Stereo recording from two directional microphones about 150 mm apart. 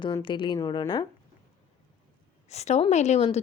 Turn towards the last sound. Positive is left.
turn(degrees=50)  # may be behind; listen again after turning